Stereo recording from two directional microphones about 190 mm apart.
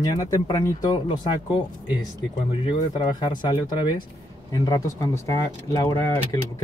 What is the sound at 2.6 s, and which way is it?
Speech, 25° left (ahead or behind).